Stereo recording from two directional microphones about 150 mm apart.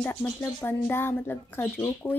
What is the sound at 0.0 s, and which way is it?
Speech, 10° left (ahead or behind).